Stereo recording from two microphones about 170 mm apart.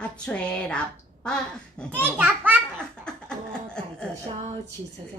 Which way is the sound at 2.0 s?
10° right (ahead or behind).